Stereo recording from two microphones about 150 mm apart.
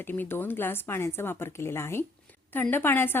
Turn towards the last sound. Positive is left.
turn(degrees=15)  # may be behind; listen again after turning